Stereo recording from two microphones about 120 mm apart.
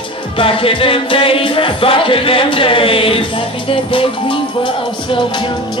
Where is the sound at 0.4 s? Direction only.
50° left (ahead or behind).